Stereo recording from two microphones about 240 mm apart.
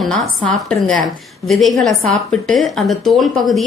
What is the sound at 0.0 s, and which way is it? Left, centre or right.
A woman's voice, centre.